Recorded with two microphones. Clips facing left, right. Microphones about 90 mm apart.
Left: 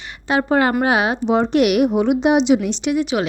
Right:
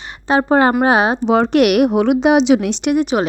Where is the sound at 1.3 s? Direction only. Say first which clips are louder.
Right 2 dB; 70° right (ahead or behind); by 3.2 s 50° right (ahead or behind).